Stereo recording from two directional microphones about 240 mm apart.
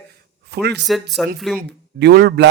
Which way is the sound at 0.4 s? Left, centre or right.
Right.